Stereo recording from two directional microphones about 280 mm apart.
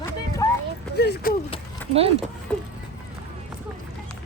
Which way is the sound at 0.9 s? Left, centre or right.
Left.